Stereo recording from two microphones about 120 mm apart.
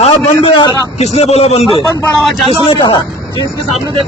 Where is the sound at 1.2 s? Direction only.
60° left (ahead or behind).